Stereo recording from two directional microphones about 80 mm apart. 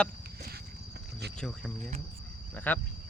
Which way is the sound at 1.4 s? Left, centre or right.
Centre.